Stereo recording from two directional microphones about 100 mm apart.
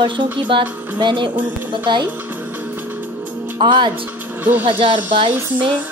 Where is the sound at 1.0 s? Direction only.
55° right (ahead or behind).